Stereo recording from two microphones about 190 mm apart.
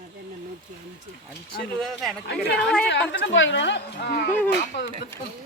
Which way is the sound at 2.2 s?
60° left (ahead or behind).